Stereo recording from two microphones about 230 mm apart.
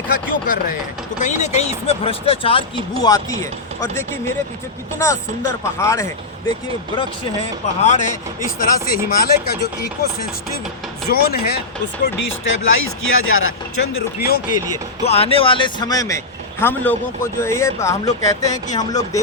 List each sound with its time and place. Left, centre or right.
0.3 s a man's voice: left; by 3.3 s centre
4.9 s a man's voice: centre
7.8 s speech: left
11.1 s speech: left
12.0 s chopping: left
14.2 s speech: left
15.0 s a man's voice: left